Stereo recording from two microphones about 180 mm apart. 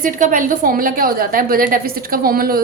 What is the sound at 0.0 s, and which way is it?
A woman's voice, 50° right (ahead or behind).